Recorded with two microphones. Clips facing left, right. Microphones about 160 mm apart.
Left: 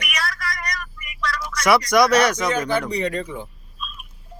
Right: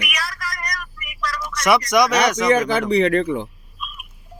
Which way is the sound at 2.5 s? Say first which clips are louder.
Right 5 dB; 70° right (ahead or behind).